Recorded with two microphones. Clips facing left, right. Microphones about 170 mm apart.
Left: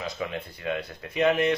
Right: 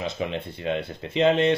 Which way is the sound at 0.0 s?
25° right (ahead or behind).